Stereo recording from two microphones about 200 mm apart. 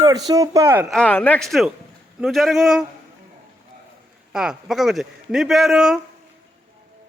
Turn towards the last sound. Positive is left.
turn(degrees=-5)  # may be behind; listen again after turning